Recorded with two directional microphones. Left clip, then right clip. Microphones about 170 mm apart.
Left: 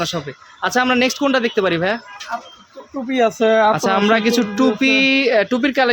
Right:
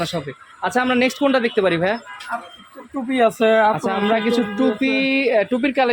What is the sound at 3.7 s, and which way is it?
Speech, 25° left (ahead or behind).